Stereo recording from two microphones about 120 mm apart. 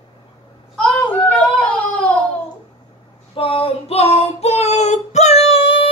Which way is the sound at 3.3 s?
50° left (ahead or behind).